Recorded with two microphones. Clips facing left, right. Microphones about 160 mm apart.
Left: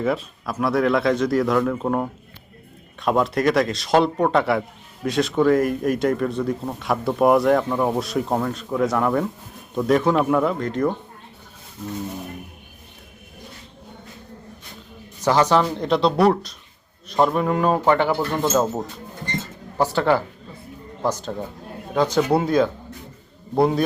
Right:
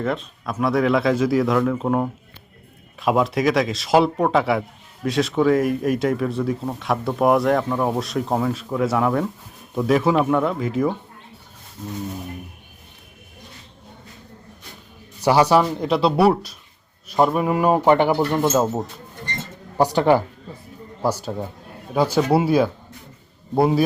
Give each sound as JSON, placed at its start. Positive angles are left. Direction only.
{"t": 0.0, "sound": "speech", "side_deg": 5}
{"t": 15.2, "sound": "speech", "side_deg": -10}
{"t": 18.4, "sound": "speech", "side_deg": -5}